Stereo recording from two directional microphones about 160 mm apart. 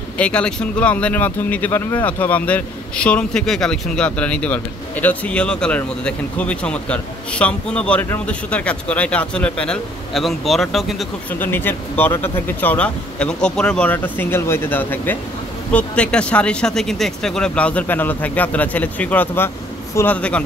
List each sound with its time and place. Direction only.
0.2 s speech: 5° left (ahead or behind)
11.3 s speech: 10° left (ahead or behind)